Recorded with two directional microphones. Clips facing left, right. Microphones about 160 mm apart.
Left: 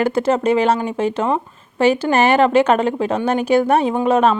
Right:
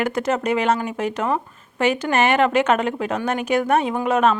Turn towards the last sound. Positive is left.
turn(degrees=30)  # may be behind; listen again after turning